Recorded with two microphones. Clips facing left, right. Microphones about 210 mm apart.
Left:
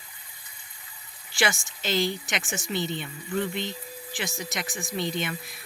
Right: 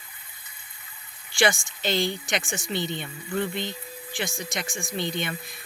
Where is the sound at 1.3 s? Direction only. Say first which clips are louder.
Right 4 dB; centre (ahead or behind).